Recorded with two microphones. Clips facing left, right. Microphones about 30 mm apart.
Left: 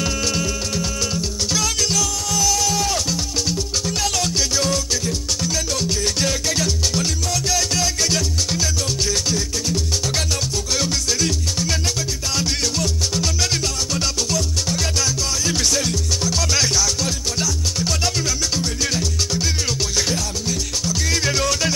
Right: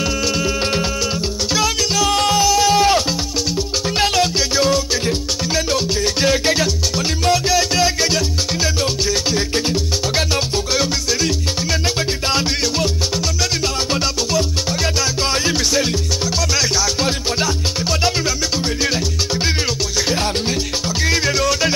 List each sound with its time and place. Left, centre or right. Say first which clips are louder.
0.0 s music: right 3 dB; centre
1.1 s music: right 3 dB; right
2.0 s music: right 8 dB; right
2.4 s music: right 5 dB; right
21.2 s music: right 2 dB; centre